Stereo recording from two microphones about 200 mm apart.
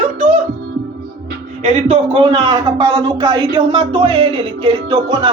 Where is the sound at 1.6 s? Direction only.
30° right (ahead or behind).